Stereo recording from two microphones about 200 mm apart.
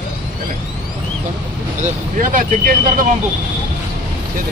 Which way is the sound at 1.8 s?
40° right (ahead or behind).